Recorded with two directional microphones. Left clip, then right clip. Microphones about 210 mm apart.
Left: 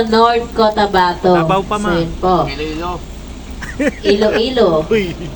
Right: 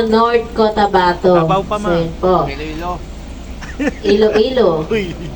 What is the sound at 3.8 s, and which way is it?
A woman's voice, 20° left (ahead or behind).